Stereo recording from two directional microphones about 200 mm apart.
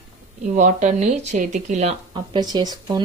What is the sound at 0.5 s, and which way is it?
Speech, 40° right (ahead or behind).